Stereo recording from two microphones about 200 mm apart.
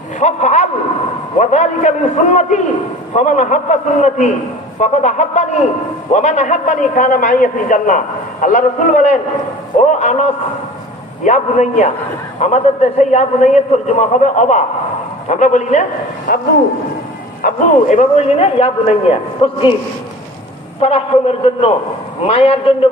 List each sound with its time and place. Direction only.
0.2 s a man's voice: 35° left (ahead or behind)
16.3 s speech: 50° left (ahead or behind)
17.4 s a man's voice: 35° left (ahead or behind)
20.8 s a man's voice: 30° left (ahead or behind)